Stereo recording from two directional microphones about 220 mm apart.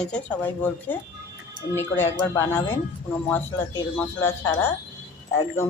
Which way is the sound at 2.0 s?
10° left (ahead or behind).